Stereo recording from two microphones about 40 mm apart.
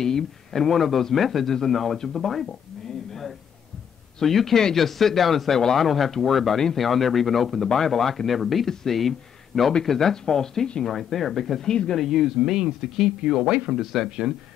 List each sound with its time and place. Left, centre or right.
0.0 s speech: centre
3.1 s a sound: centre
4.2 s speech: centre
10.9 s speech: centre
11.6 s speech: centre
12.0 s speech: centre